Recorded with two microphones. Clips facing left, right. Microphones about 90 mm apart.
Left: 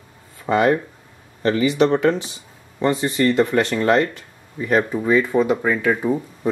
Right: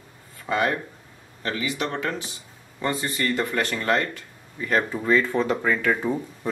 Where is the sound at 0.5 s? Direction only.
25° left (ahead or behind).